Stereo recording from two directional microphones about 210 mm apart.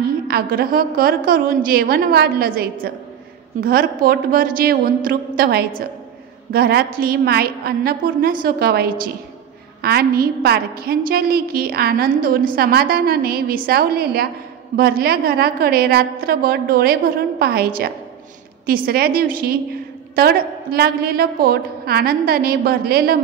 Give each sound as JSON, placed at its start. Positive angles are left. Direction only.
{"t": 0.3, "sound": "a woman's voice", "side_deg": -45}